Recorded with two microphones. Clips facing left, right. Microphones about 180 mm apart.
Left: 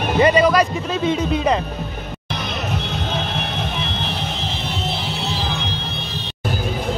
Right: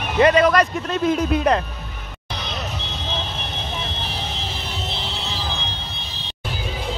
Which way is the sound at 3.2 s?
70° left (ahead or behind).